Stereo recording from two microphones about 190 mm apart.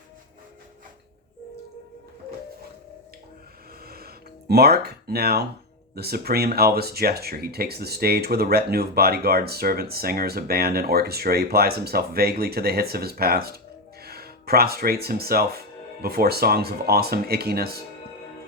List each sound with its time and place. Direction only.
3.8 s music: 55° right (ahead or behind)
5.9 s speech: 55° right (ahead or behind)